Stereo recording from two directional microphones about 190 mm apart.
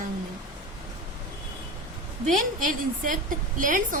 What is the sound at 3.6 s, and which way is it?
Speech, 45° right (ahead or behind).